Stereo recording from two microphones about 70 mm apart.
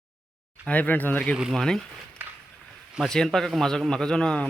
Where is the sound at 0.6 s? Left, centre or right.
Centre.